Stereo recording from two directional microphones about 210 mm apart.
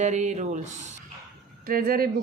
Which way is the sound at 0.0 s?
35° right (ahead or behind).